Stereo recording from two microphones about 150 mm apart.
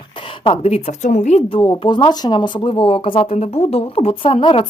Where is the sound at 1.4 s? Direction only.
30° left (ahead or behind).